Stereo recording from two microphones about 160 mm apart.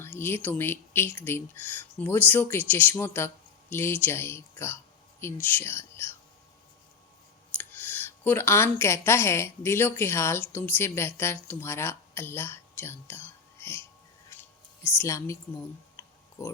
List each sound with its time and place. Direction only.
0.0 s a woman's voice: 15° left (ahead or behind)
7.6 s a sound: 10° left (ahead or behind)
8.8 s a woman's voice: 15° left (ahead or behind)
14.9 s a woman's voice: 15° left (ahead or behind)
16.0 s a sound: 15° left (ahead or behind)
16.4 s speech: 20° left (ahead or behind)